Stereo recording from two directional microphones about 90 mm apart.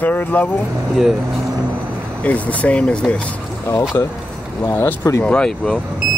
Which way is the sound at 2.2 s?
15° left (ahead or behind).